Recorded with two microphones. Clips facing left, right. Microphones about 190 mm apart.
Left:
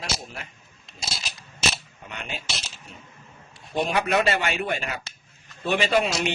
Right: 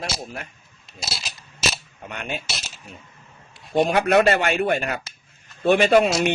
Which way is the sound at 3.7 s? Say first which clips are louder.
Right 6 dB; 55° right (ahead or behind).